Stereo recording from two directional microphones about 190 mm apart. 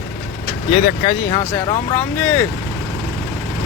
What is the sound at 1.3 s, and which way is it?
Speech, 20° left (ahead or behind).